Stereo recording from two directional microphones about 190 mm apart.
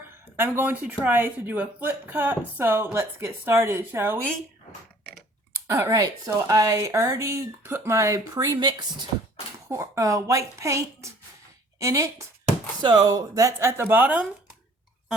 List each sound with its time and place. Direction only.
0.3 s speech: 10° right (ahead or behind)
5.6 s speech: 15° right (ahead or behind)